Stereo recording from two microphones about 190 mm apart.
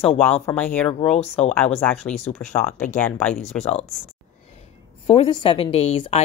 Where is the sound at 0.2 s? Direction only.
10° left (ahead or behind).